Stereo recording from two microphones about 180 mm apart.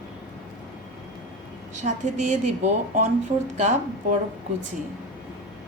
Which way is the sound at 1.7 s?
40° right (ahead or behind).